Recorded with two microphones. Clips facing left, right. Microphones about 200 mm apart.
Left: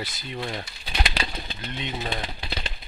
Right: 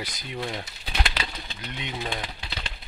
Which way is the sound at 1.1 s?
30° left (ahead or behind).